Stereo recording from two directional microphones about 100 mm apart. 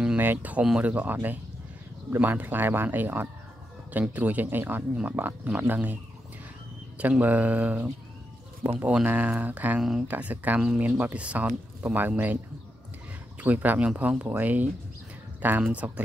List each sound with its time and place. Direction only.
0.0 s speech: 15° right (ahead or behind)
7.0 s speech: 15° right (ahead or behind)
13.4 s speech: 15° right (ahead or behind)